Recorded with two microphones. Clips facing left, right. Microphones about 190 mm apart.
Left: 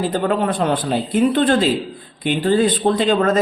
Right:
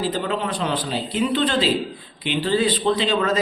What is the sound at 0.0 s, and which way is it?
Speech, 50° left (ahead or behind).